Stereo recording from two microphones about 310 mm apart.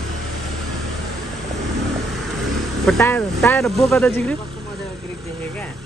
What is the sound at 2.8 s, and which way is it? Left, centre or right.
Speech, centre.